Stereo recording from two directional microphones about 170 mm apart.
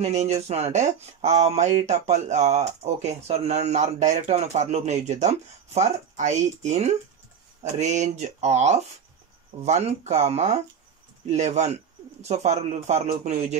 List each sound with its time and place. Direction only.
0.0 s speech: 40° right (ahead or behind)